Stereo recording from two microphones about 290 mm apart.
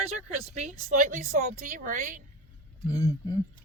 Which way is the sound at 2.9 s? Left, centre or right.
Centre.